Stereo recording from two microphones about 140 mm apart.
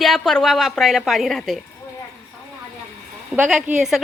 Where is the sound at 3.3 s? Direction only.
10° right (ahead or behind).